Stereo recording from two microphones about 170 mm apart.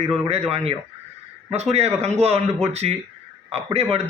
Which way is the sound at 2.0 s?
35° right (ahead or behind).